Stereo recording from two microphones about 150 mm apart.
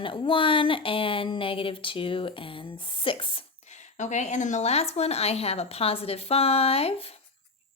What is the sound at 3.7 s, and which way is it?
Speech, 50° left (ahead or behind).